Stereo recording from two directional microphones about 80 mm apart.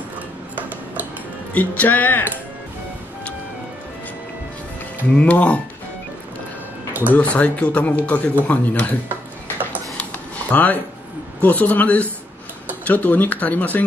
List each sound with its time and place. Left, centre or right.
0.6 s tick-tock: right
1.5 s speech: centre
5.1 s speech: centre
6.9 s a sound: right
7.2 s speech: centre
10.5 s speech: left